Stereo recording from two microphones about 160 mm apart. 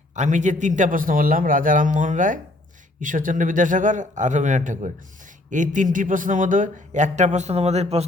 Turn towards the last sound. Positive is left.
turn(degrees=-40)  # may be behind; listen again after turning